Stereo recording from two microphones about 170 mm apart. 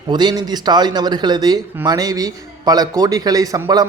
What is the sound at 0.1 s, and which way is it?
Speech, 25° right (ahead or behind).